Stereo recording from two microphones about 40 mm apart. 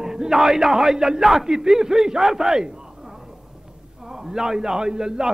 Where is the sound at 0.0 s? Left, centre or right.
Centre.